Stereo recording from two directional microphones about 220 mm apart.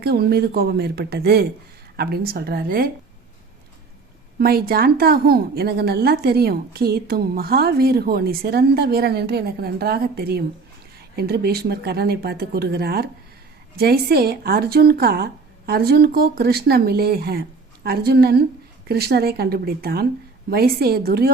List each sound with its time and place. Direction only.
0.0 s a woman's voice: 45° right (ahead or behind)
4.4 s a woman's voice: 45° right (ahead or behind)